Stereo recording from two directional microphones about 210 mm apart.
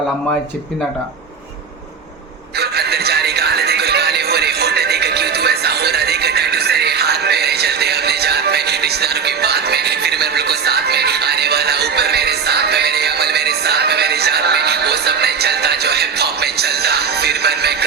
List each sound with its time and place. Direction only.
2.6 s music: 50° right (ahead or behind)